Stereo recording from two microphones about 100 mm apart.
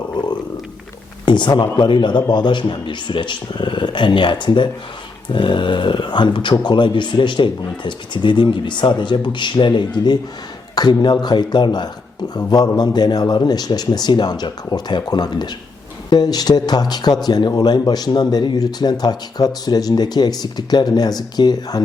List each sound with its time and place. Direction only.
1.2 s speech: 50° left (ahead or behind)